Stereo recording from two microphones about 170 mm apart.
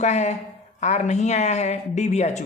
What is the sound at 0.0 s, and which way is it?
A woman's voice, 40° left (ahead or behind).